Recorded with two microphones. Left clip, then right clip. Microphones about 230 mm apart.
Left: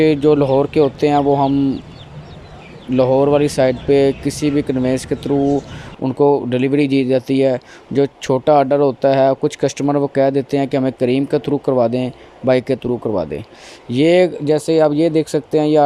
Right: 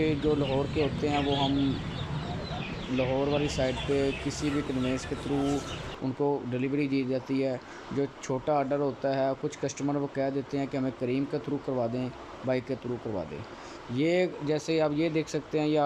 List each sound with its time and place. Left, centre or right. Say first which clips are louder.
0.0 s speech: left 15 dB; left
3.0 s speech: left 15 dB; left
6.1 s speech: left 16 dB; left